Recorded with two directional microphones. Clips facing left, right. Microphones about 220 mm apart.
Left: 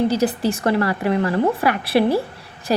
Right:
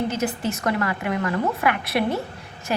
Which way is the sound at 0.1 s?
35° left (ahead or behind).